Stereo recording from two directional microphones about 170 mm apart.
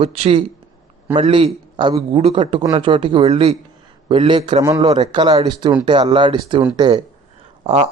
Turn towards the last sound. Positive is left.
turn(degrees=-40)  # may be behind; listen again after turning